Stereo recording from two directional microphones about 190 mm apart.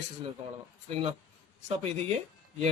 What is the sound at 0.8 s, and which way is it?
A man's voice, 30° right (ahead or behind).